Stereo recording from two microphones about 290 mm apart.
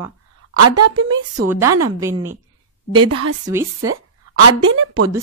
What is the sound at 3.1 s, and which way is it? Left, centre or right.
Speech, right.